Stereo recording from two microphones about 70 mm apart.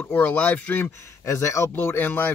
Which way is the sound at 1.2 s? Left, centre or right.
Left.